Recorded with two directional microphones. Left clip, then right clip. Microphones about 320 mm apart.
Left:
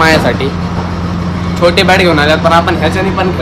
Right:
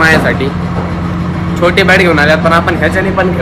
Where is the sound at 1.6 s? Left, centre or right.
Centre.